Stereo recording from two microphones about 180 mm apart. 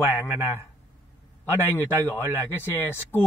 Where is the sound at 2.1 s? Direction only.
10° right (ahead or behind).